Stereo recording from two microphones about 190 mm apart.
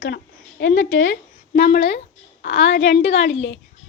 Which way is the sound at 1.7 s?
60° left (ahead or behind).